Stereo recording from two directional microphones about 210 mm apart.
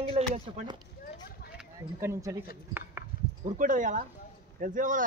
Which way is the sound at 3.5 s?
40° right (ahead or behind).